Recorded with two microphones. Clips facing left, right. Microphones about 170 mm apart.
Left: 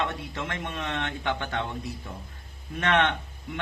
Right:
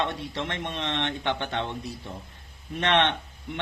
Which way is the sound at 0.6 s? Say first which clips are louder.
Right 2 dB; 25° right (ahead or behind).